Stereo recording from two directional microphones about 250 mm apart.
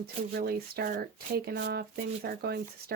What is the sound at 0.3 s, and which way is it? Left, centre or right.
Speech, right.